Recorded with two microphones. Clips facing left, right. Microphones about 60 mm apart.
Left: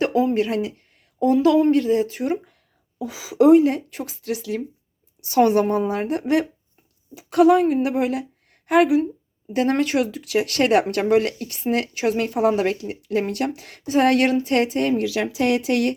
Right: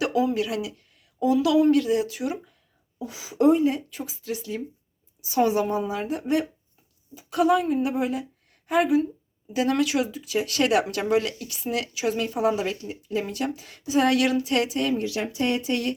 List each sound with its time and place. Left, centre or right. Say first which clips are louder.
0.0 s speech: left 4 dB; left
3.0 s a woman's voice: left 4 dB; left
9.5 s speech: left 3 dB; left
10.1 s speech: left 5 dB; left
10.6 s speech: left 4 dB; left
14.9 s speech: left 5 dB; left